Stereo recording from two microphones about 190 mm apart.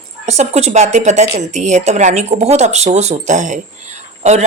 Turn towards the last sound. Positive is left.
turn(degrees=-35)  # may be behind; listen again after turning